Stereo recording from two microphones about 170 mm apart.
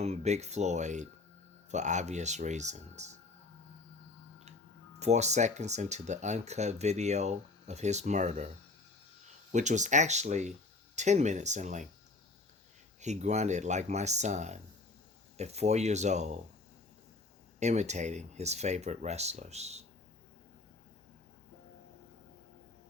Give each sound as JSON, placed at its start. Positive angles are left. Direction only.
{"t": 0.0, "sound": "speech", "side_deg": -40}
{"t": 4.9, "sound": "speech", "side_deg": -40}
{"t": 9.5, "sound": "speech", "side_deg": -45}
{"t": 13.0, "sound": "speech", "side_deg": -40}
{"t": 17.6, "sound": "speech", "side_deg": -40}